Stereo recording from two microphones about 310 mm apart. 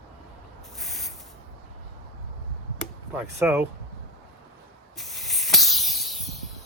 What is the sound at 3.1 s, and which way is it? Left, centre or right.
Speech, centre.